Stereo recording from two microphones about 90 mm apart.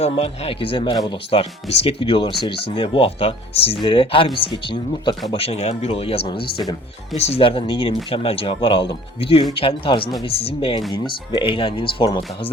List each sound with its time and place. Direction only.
0.2 s speech: 90° left
3.8 s speech: 75° left (ahead or behind)
4.4 s speech: 65° left (ahead or behind)
5.3 s speech: 90° left; by 7.9 s 75° left (ahead or behind)
8.1 s speech: 90° left
10.2 s speech: 90° left
10.9 s speech: 65° left (ahead or behind); by 12.5 s 80° left